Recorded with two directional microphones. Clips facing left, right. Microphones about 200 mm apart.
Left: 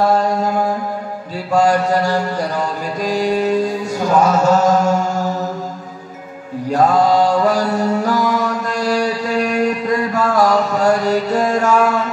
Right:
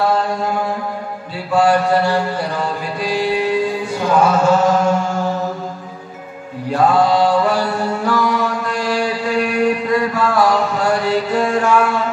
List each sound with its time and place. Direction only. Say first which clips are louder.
0.0 s mantra: left 2 dB; 40° left (ahead or behind)
6.7 s chant: left 1 dB; 40° left (ahead or behind)
10.1 s a sound: left 1 dB; 40° left (ahead or behind)